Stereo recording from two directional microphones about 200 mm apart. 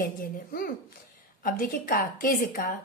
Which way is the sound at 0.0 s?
45° left (ahead or behind).